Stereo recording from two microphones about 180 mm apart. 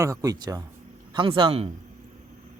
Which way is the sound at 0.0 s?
20° right (ahead or behind).